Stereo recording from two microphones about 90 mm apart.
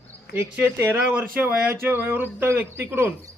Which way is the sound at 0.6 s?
20° right (ahead or behind).